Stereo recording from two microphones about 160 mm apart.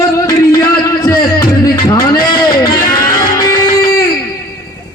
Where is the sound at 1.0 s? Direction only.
25° left (ahead or behind).